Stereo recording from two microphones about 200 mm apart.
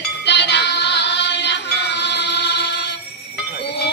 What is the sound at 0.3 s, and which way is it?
Music, 60° left (ahead or behind).